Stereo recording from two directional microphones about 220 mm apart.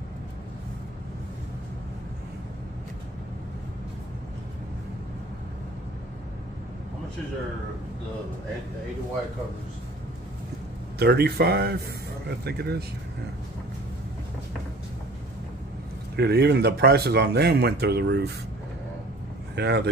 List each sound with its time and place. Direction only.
11.0 s speech: 45° right (ahead or behind)
16.2 s speech: 50° right (ahead or behind)
19.5 s speech: 50° right (ahead or behind)